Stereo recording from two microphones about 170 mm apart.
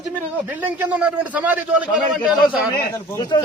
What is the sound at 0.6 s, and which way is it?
A man's voice, 10° right (ahead or behind).